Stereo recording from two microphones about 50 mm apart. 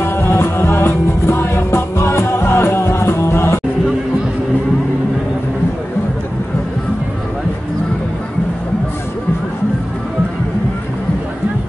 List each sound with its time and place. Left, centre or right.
0.0 s music: left